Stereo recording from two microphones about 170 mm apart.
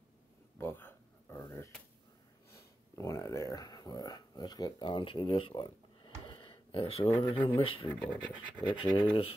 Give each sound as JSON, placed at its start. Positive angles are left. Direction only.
{"t": 0.6, "sound": "a sound", "side_deg": 15}
{"t": 7.2, "sound": "speech", "side_deg": 30}
{"t": 7.9, "sound": "speech", "side_deg": 10}
{"t": 8.6, "sound": "speech", "side_deg": 30}